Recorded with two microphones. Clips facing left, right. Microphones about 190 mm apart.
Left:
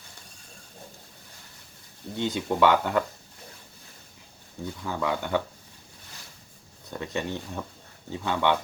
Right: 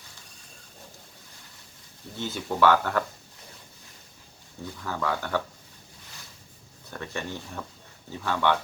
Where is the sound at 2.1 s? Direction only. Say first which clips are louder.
Left 2 dB; 15° left (ahead or behind).